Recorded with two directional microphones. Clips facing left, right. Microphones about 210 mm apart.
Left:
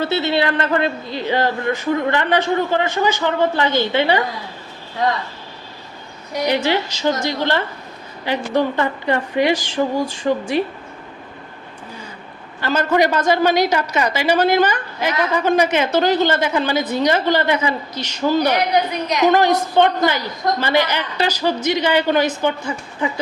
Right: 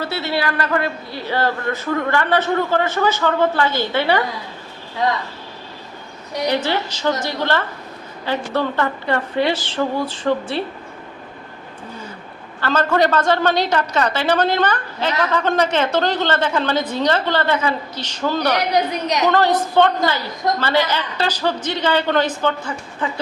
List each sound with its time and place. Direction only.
0.0 s a man's voice: 25° left (ahead or behind)
6.5 s a woman's voice: 15° left (ahead or behind)
12.5 s a woman's voice: 15° left (ahead or behind)